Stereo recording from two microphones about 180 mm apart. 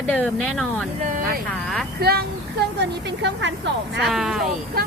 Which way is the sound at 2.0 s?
60° right (ahead or behind).